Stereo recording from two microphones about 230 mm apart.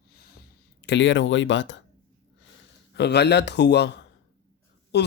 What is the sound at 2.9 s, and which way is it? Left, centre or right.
Speech, left.